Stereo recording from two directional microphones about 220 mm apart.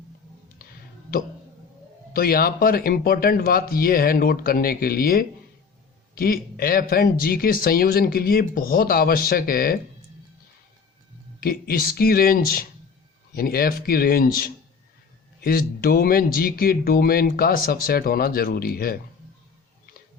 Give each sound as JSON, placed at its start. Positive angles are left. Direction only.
{"t": 0.6, "sound": "a sound", "side_deg": 40}
{"t": 2.1, "sound": "a man's voice", "side_deg": 40}
{"t": 11.3, "sound": "a man's voice", "side_deg": 40}